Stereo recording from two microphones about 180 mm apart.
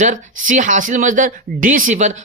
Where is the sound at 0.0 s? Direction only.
45° right (ahead or behind).